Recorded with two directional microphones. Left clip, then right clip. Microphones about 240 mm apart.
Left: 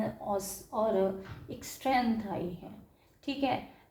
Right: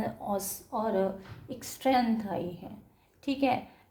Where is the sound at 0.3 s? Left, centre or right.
Right.